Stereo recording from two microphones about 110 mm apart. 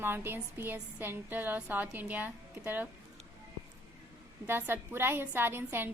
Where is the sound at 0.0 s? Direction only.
20° right (ahead or behind).